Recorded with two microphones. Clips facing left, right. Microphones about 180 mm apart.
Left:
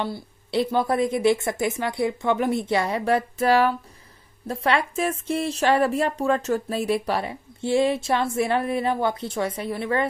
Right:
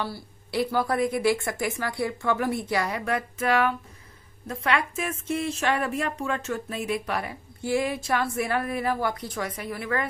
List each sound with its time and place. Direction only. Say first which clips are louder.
0.0 s speech: left 4 dB; 20° left (ahead or behind)